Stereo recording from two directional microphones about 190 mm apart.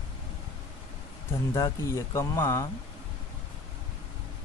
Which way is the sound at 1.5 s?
15° left (ahead or behind).